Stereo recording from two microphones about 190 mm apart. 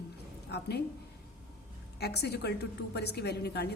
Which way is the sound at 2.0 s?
60° left (ahead or behind).